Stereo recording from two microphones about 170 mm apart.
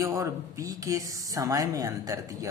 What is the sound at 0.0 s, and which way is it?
Speech, 20° right (ahead or behind).